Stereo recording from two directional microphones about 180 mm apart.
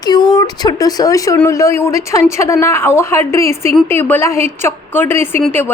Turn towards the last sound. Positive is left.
turn(degrees=10)  # may be behind; listen again after turning